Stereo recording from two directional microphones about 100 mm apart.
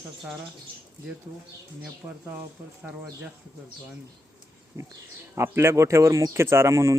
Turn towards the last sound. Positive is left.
turn(degrees=-30)  # may be behind; listen again after turning